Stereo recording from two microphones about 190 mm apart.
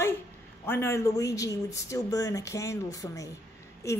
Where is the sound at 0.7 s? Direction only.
15° left (ahead or behind).